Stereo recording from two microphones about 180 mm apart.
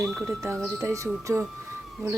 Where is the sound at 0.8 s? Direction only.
15° right (ahead or behind).